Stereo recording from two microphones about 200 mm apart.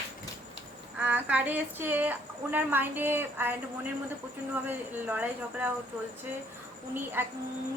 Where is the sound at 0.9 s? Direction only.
5° right (ahead or behind).